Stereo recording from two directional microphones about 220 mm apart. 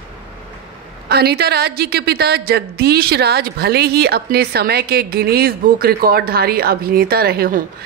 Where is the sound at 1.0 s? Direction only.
45° right (ahead or behind).